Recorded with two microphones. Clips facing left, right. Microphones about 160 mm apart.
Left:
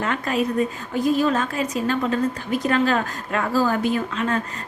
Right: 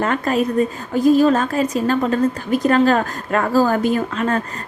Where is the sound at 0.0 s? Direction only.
45° right (ahead or behind).